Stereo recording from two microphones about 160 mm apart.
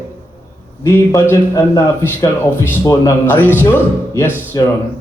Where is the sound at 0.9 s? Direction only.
15° left (ahead or behind).